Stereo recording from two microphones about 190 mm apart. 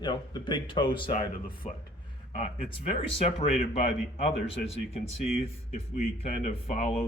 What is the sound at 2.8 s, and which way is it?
A man's voice, 30° left (ahead or behind).